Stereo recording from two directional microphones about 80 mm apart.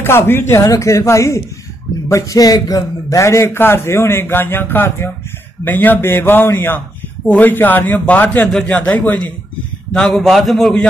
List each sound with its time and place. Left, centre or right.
0.0 s a man's voice: left
9.9 s a man's voice: centre